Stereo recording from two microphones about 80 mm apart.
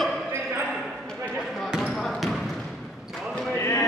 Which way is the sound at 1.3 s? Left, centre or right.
Centre.